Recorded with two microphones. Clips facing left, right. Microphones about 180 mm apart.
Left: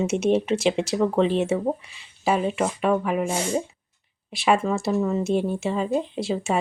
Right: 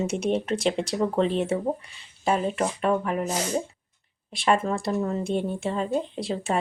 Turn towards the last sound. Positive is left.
turn(degrees=0)  # may be behind; listen again after turning